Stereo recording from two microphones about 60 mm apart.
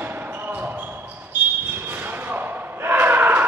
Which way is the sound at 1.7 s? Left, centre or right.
Right.